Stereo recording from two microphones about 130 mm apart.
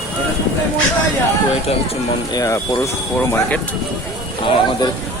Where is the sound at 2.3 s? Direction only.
25° left (ahead or behind).